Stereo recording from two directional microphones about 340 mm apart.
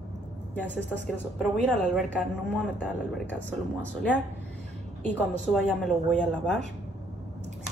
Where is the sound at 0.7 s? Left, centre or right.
Centre.